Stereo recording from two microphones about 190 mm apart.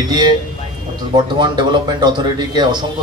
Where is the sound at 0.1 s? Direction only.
20° right (ahead or behind).